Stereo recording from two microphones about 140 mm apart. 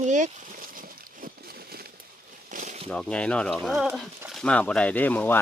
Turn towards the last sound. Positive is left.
turn(degrees=10)  # may be behind; listen again after turning